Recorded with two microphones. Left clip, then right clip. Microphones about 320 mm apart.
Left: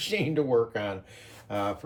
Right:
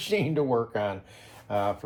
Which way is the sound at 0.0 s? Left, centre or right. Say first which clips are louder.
Right 1 dB; right.